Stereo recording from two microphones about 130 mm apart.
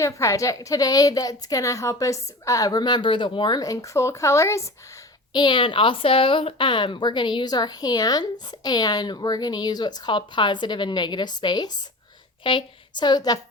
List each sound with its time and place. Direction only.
0.0 s a woman's voice: 25° left (ahead or behind)
5.3 s a woman's voice: 35° left (ahead or behind)